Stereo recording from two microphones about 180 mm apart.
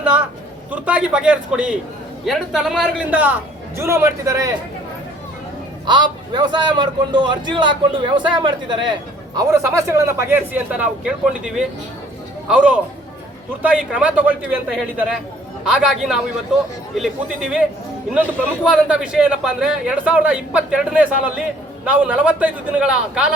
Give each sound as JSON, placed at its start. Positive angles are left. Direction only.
{"t": 0.7, "sound": "a man's voice", "side_deg": -5}
{"t": 5.8, "sound": "a man's voice", "side_deg": -25}
{"t": 18.7, "sound": "a man's voice", "side_deg": -5}